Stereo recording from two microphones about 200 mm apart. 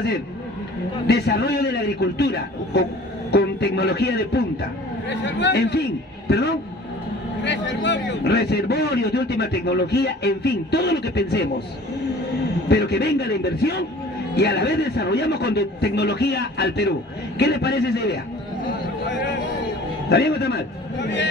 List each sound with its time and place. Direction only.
1.0 s a man's voice: 55° left (ahead or behind)
12.6 s a man's voice: 55° left (ahead or behind)
20.1 s a man's voice: 55° left (ahead or behind)